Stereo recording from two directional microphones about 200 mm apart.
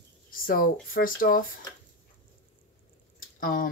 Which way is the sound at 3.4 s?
45° left (ahead or behind).